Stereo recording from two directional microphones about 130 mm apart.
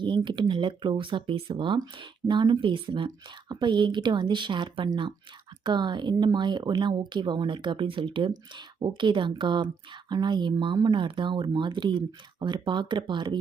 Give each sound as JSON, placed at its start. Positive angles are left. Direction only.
{"t": 0.0, "sound": "speech", "side_deg": -40}